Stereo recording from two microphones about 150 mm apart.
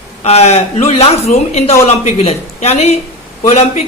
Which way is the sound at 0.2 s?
45° left (ahead or behind).